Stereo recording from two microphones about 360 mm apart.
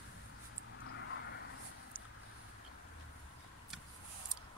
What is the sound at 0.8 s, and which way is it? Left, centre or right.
Vehicle, left.